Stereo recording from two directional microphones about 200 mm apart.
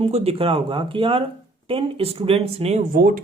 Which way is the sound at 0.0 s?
30° right (ahead or behind).